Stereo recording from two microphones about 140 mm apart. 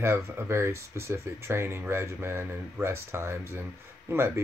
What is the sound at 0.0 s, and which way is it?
Speech, 15° right (ahead or behind).